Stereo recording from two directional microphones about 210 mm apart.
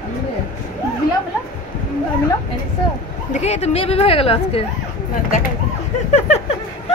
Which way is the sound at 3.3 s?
30° left (ahead or behind).